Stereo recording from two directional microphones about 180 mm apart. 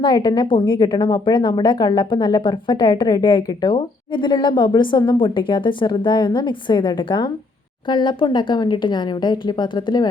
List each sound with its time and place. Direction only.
0.0 s a woman's voice: 25° left (ahead or behind)